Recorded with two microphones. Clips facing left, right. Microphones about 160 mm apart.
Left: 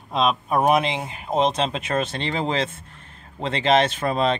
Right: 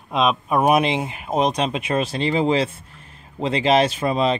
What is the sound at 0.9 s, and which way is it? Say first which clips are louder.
Speech: right 3 dB; 20° right (ahead or behind).